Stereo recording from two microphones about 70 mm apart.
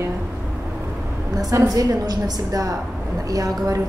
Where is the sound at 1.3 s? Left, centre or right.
Right.